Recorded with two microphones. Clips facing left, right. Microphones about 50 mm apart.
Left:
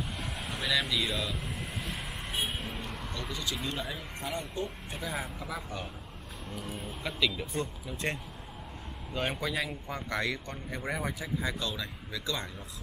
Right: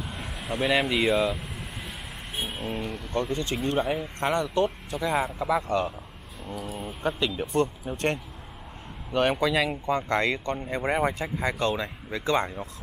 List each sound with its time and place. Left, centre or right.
0.8 s speech: right
2.4 s speech: centre
3.2 s speech: right
3.5 s speech: right
7.0 s speech: right